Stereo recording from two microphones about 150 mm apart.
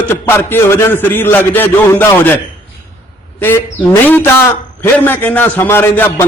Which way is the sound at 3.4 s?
15° left (ahead or behind).